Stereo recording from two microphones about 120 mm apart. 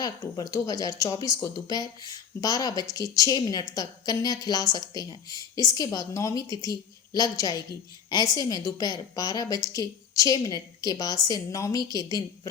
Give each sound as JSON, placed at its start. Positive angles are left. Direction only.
{"t": 0.0, "sound": "speech", "side_deg": 30}